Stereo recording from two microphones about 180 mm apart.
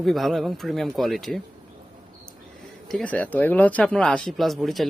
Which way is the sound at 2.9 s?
5° left (ahead or behind).